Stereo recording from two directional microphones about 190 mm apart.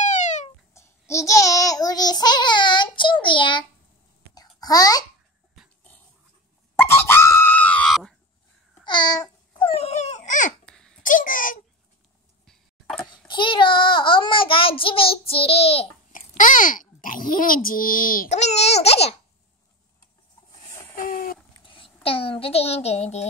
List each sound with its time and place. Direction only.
0.0 s a sound: 40° left (ahead or behind)
0.7 s child singing: 15° left (ahead or behind)
4.6 s a child's voice: 20° left (ahead or behind)
6.8 s screaming: 10° left (ahead or behind)
8.8 s babbling: 25° left (ahead or behind); by 10.5 s 40° left (ahead or behind)
10.6 s babbling: 5° left (ahead or behind)
11.0 s a sound: 45° left (ahead or behind)
13.3 s a child's voice: 25° left (ahead or behind)
16.1 s babbling: 45° left (ahead or behind)
17.0 s a child's voice: 45° left (ahead or behind)
20.9 s a sound: 45° left (ahead or behind)
21.6 s a child's voice: 30° left (ahead or behind)